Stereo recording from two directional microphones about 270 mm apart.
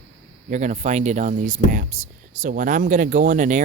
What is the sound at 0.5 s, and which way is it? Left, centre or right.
Speech, right.